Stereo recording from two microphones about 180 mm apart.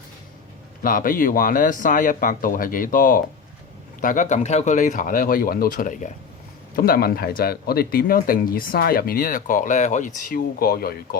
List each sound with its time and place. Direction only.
0.8 s speech: 50° left (ahead or behind)